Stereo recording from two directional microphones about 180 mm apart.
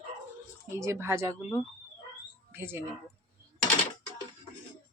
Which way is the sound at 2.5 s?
10° right (ahead or behind).